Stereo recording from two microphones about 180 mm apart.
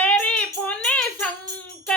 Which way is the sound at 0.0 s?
5° left (ahead or behind).